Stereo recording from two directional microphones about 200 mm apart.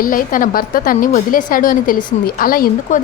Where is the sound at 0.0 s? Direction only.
45° left (ahead or behind).